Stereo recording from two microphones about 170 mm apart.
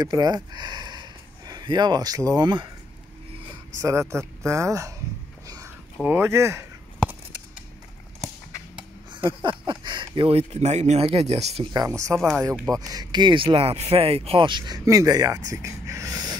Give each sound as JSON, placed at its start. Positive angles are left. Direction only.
{"t": 0.0, "sound": "speech", "side_deg": -25}
{"t": 3.8, "sound": "speech", "side_deg": -15}
{"t": 6.0, "sound": "speech", "side_deg": -15}
{"t": 9.1, "sound": "speech", "side_deg": -30}
{"t": 11.7, "sound": "speech", "side_deg": -20}
{"t": 12.2, "sound": "speech", "side_deg": 0}
{"t": 12.7, "sound": "speech", "side_deg": -20}